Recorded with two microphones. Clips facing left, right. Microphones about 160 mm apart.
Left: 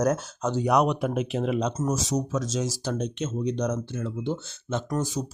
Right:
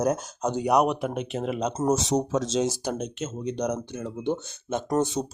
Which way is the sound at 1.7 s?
30° right (ahead or behind).